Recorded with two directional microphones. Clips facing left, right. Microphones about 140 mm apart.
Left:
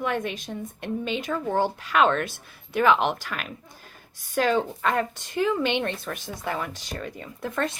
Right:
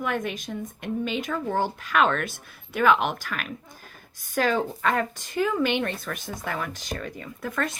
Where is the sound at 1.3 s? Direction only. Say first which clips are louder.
Left 4 dB; 20° left (ahead or behind).